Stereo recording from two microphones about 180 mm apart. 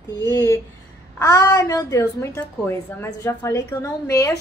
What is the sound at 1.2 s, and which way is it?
A woman's voice, 20° left (ahead or behind).